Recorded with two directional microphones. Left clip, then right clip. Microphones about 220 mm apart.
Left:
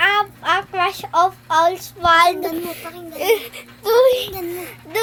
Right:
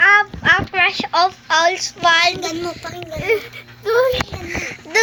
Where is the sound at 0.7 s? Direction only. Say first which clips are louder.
Right 3 dB; 5° left (ahead or behind).